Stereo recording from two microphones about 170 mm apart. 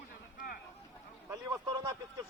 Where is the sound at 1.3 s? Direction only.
20° right (ahead or behind).